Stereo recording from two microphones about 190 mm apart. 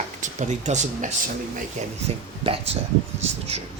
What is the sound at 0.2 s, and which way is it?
Speech, 40° right (ahead or behind).